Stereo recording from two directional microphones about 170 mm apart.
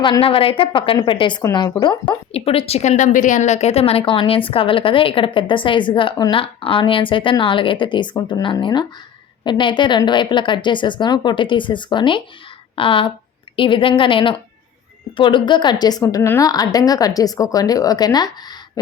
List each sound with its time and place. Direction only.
0.0 s a woman's voice: 30° left (ahead or behind)
2.3 s a woman's voice: 35° left (ahead or behind)